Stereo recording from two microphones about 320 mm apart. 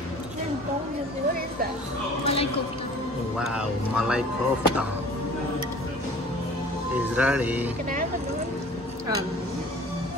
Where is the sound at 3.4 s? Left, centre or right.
Centre.